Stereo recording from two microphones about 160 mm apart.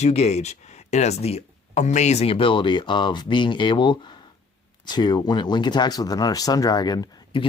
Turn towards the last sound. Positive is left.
turn(degrees=30)  # may be behind; listen again after turning